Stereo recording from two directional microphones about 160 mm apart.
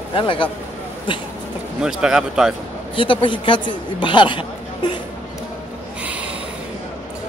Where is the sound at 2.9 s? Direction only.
30° left (ahead or behind).